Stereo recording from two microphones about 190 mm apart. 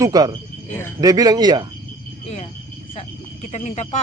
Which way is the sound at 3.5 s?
35° left (ahead or behind).